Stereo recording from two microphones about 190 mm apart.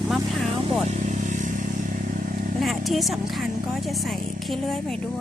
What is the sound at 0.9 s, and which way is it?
Vehicle, 40° right (ahead or behind).